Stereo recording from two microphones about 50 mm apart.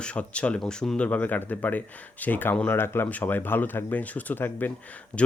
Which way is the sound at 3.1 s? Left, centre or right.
Left.